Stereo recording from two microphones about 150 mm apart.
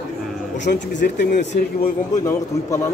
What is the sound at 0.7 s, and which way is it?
Speech, 65° left (ahead or behind).